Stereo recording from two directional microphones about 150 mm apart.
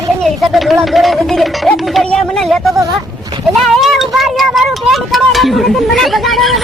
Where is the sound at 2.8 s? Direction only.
25° right (ahead or behind).